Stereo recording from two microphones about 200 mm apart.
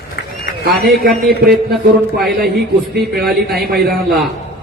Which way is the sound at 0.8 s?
50° right (ahead or behind).